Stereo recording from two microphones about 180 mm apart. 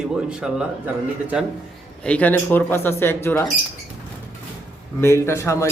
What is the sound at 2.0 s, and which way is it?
Speech, 10° left (ahead or behind).